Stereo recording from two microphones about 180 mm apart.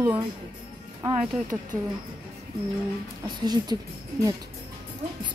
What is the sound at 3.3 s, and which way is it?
Speech, 25° right (ahead or behind).